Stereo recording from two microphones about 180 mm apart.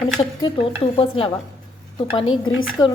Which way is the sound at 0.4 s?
30° left (ahead or behind).